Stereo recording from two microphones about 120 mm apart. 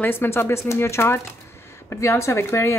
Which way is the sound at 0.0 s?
20° left (ahead or behind).